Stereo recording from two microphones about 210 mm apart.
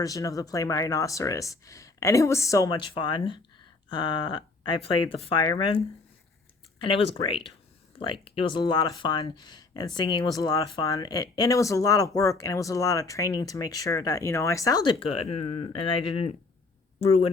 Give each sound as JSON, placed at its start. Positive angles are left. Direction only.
{"t": 0.0, "sound": "speech", "side_deg": 15}